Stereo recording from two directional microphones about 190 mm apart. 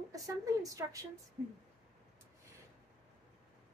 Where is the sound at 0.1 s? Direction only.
20° right (ahead or behind).